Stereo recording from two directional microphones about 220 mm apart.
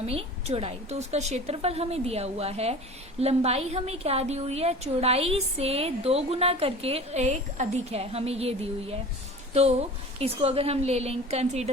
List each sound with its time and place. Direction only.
0.0 s a woman's voice: 25° right (ahead or behind)